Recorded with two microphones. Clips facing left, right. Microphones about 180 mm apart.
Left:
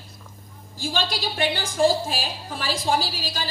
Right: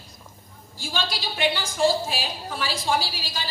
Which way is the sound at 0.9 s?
40° left (ahead or behind).